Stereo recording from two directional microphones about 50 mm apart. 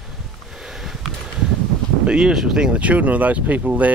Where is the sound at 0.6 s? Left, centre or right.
Centre.